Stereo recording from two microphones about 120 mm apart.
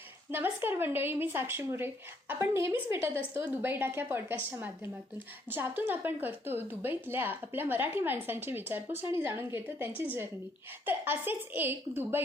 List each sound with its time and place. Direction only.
0.3 s a woman's voice: 20° right (ahead or behind)